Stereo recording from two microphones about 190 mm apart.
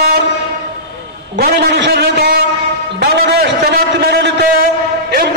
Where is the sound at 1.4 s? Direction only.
60° right (ahead or behind).